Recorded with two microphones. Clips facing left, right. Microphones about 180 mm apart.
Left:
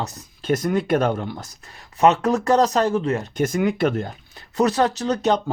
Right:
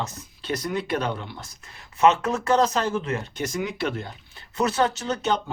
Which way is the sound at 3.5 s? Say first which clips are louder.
Left 7 dB; 55° left (ahead or behind).